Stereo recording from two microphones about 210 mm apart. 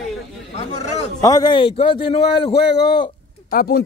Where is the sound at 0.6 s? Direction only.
30° left (ahead or behind).